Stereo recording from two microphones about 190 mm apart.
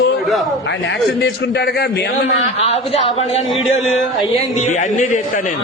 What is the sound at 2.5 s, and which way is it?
Speech, 35° left (ahead or behind).